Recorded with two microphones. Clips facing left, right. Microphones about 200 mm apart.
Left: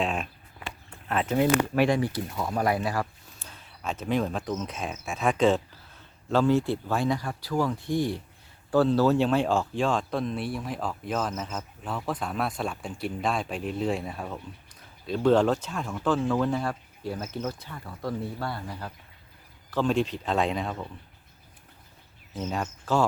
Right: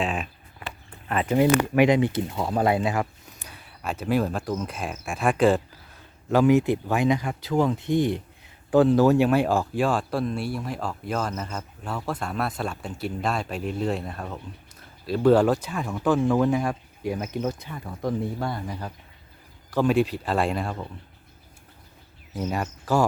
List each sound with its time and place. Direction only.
0.0 s speech: centre (ahead or behind)
1.7 s speech: 15° right (ahead or behind)
3.5 s speech: 10° right (ahead or behind)
22.4 s speech: 15° right (ahead or behind)